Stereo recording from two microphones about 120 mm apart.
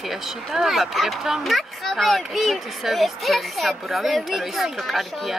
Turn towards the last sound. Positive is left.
turn(degrees=0)  # may be behind; listen again after turning